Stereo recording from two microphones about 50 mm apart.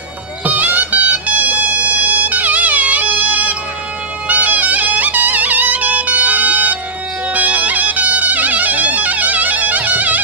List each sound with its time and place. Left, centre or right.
0.4 s music: right